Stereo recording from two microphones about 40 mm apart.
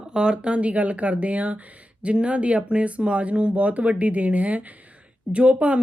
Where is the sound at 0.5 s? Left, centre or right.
Right.